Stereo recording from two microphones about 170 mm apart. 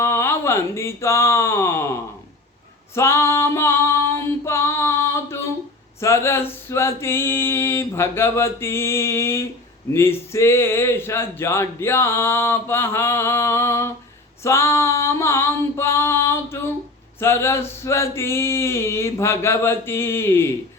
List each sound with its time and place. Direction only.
0.0 s speech: 15° left (ahead or behind)
2.9 s female singing: 15° left (ahead or behind)
6.0 s speech: 15° left (ahead or behind)